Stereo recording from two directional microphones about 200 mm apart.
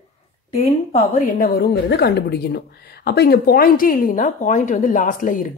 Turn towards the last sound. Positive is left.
turn(degrees=40)  # may be behind; listen again after turning